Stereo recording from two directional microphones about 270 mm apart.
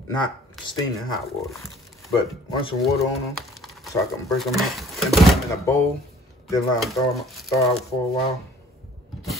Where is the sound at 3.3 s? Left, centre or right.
Centre.